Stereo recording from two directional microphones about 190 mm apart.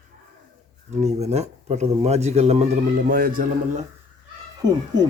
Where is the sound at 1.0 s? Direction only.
35° right (ahead or behind).